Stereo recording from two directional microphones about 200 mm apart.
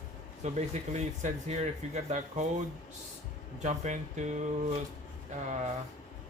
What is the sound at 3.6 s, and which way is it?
Speech, 35° right (ahead or behind).